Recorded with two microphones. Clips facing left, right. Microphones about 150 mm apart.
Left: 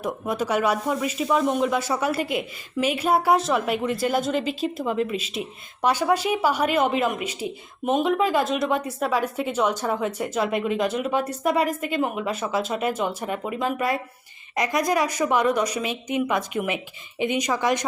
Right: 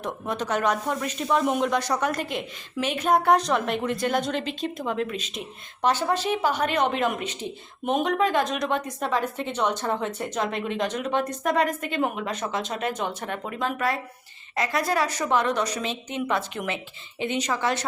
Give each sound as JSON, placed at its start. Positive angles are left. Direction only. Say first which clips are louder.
{"t": 0.0, "sound": "speech", "louder": "left 3 dB", "side_deg": 10}